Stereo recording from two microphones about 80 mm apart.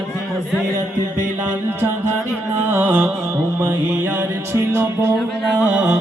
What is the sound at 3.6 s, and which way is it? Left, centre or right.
A man's voice, right.